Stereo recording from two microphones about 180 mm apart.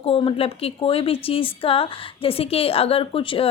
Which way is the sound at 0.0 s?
30° left (ahead or behind).